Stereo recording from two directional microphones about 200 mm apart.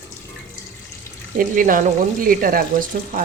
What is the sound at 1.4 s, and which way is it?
Speech, 45° right (ahead or behind).